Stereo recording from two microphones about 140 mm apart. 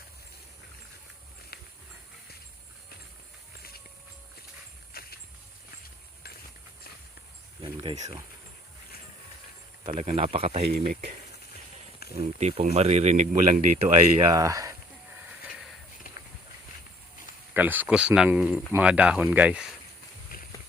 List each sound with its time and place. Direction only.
4.9 s vehicle: 90° left
7.6 s cricket: 40° right (ahead or behind)
9.9 s speech: 50° right (ahead or behind)
12.4 s speech: 50° right (ahead or behind)
14.3 s a sound: 25° right (ahead or behind)
15.3 s a sound: centre (ahead or behind)
17.5 s speech: 15° right (ahead or behind)
20.3 s run: 90° left